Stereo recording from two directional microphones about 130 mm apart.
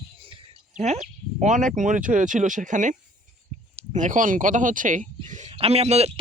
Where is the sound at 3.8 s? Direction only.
65° right (ahead or behind).